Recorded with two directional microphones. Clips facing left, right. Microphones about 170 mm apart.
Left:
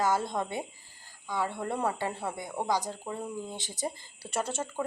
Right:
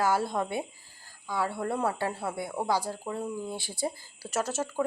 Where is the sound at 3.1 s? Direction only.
Centre (ahead or behind).